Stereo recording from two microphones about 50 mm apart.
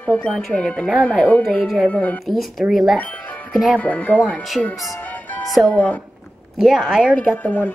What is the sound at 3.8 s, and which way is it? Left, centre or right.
Speech, left.